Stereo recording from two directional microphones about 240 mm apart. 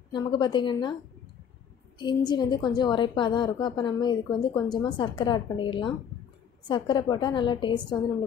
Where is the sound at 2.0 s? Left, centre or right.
Centre.